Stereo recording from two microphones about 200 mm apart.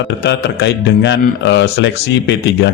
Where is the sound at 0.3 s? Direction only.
60° left (ahead or behind).